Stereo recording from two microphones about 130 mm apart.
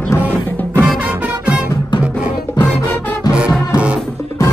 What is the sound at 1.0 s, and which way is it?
Music, 10° right (ahead or behind).